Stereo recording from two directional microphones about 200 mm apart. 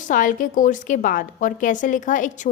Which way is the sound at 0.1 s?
40° left (ahead or behind).